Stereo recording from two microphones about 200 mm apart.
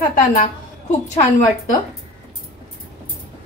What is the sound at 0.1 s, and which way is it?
A woman's voice, 35° left (ahead or behind).